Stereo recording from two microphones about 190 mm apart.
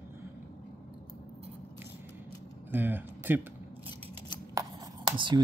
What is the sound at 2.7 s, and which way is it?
Speech, 10° right (ahead or behind).